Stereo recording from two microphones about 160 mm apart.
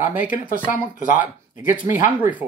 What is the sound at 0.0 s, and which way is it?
Speech, 55° left (ahead or behind).